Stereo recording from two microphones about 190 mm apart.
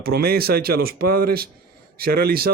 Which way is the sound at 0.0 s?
55° right (ahead or behind).